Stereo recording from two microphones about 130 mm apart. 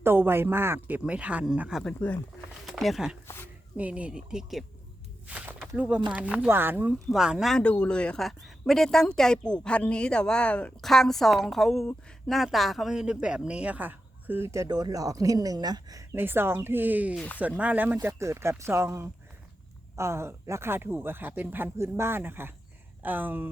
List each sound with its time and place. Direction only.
0.0 s speech: 15° right (ahead or behind)
1.8 s speech: 10° left (ahead or behind)
3.2 s speech: 15° left (ahead or behind)
3.8 s speech: 10° right (ahead or behind)
5.3 s a sound: 10° right (ahead or behind)
5.7 s speech: 10° right (ahead or behind)
7.1 s speech: 5° right (ahead or behind)
17.2 s speech: 10° left (ahead or behind)
17.6 s speech: 10° right (ahead or behind)